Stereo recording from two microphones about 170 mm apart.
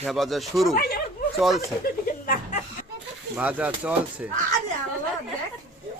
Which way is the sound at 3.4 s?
10° right (ahead or behind).